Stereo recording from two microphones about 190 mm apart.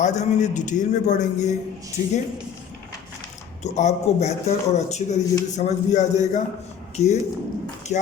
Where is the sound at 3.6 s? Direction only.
35° left (ahead or behind).